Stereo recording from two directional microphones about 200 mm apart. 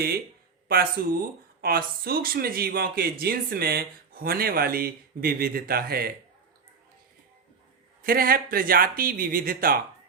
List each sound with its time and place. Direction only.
1.0 s speech: 50° right (ahead or behind)
8.0 s speech: 45° right (ahead or behind)